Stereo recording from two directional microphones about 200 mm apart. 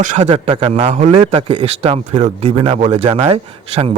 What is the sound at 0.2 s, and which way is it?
A man's voice, 25° right (ahead or behind).